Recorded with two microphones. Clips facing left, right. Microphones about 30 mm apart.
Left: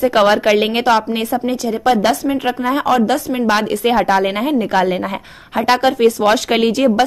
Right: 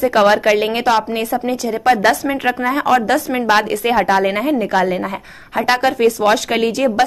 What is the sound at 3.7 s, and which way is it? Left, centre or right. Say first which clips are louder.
Speech: left 1 dB; centre.